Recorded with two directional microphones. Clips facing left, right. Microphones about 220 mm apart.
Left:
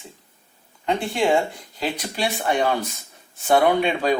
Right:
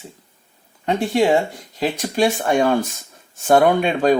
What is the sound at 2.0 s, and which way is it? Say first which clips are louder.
Speech: right 7 dB; 45° right (ahead or behind).